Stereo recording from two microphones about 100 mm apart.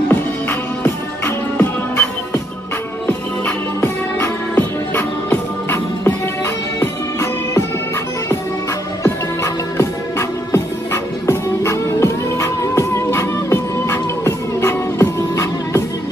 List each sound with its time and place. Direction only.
0.1 s music: 20° left (ahead or behind)
9.0 s music: 25° left (ahead or behind)